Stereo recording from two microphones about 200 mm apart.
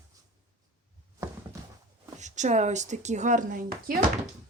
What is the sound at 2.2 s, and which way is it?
Speech, 35° right (ahead or behind).